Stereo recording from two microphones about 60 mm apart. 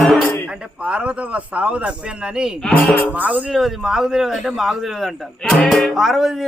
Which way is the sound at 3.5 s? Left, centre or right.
Centre.